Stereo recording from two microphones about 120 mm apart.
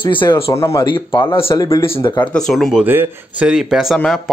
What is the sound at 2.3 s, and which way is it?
Speech, centre (ahead or behind).